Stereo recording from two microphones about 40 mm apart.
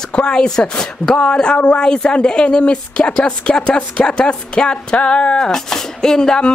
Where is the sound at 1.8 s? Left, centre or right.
Centre.